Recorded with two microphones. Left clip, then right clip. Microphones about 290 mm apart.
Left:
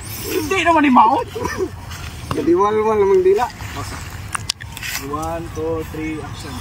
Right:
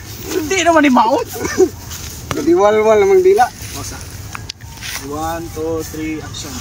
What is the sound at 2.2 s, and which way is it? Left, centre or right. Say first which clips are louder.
Speech: right 4 dB; right.